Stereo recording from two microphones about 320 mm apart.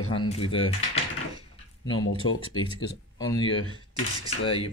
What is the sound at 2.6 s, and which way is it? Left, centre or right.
Speech, centre.